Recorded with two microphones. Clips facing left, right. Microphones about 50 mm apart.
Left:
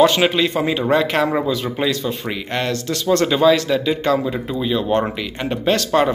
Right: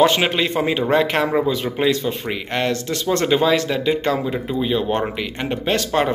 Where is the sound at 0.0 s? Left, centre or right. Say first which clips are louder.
Left 2 dB; right.